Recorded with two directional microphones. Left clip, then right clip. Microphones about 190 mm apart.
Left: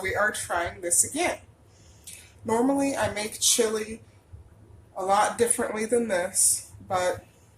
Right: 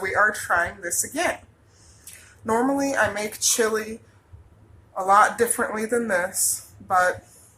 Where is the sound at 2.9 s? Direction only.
Centre (ahead or behind).